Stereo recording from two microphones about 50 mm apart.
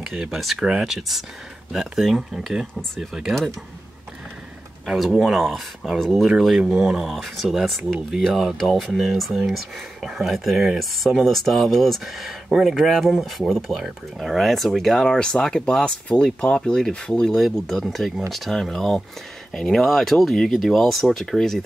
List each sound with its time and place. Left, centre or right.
0.0 s speech: centre
4.8 s speech: centre
6.4 s speech: centre
10.8 s speech: centre